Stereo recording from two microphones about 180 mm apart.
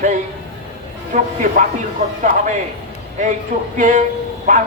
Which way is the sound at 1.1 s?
45° right (ahead or behind).